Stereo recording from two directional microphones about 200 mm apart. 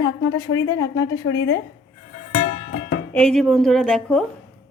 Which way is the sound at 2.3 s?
50° left (ahead or behind).